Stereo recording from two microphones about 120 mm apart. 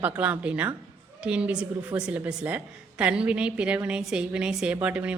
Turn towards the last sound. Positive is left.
turn(degrees=-10)  # may be behind; listen again after turning